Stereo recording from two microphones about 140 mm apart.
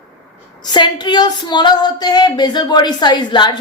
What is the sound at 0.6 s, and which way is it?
A woman's voice, 30° left (ahead or behind).